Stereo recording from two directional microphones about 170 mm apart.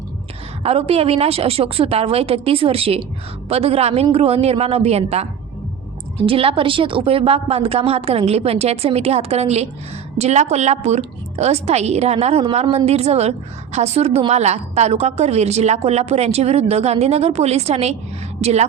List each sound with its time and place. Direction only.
0.6 s a woman's voice: 35° right (ahead or behind)